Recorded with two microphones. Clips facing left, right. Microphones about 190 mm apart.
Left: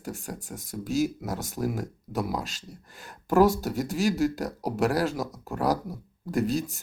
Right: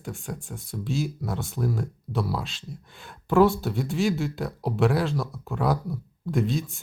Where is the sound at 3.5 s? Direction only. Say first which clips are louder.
Even; 40° left (ahead or behind).